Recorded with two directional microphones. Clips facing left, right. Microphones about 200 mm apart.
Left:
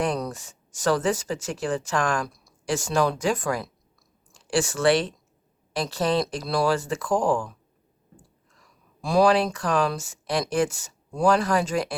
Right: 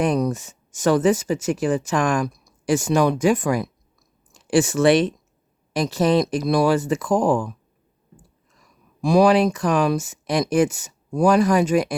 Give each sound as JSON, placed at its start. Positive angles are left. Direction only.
{"t": 0.0, "sound": "speech", "side_deg": -20}
{"t": 8.5, "sound": "speech", "side_deg": -15}